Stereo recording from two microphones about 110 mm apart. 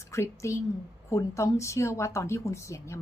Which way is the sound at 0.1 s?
25° left (ahead or behind).